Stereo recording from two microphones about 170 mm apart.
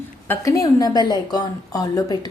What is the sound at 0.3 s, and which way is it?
A woman's voice, 20° left (ahead or behind).